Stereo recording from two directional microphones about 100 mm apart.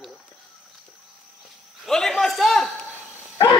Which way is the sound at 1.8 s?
5° left (ahead or behind).